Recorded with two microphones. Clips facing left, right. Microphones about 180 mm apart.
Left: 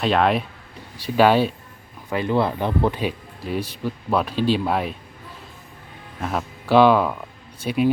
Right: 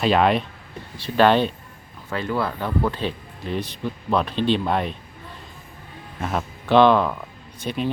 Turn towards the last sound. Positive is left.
turn(degrees=10)  # may be behind; listen again after turning